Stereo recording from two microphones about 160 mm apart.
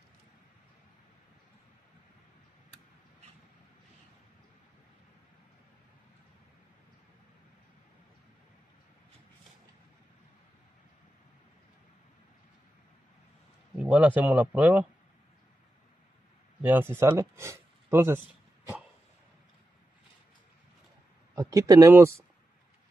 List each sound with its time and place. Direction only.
13.7 s speech: 10° right (ahead or behind)
16.6 s speech: 15° right (ahead or behind)
21.4 s speech: 20° right (ahead or behind)